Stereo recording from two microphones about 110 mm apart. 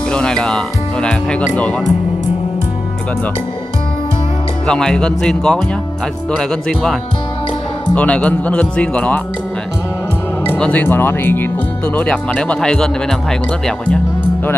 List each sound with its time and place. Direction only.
0.1 s speech: 5° left (ahead or behind)
4.6 s speech: 5° left (ahead or behind)
10.6 s speech: 15° left (ahead or behind)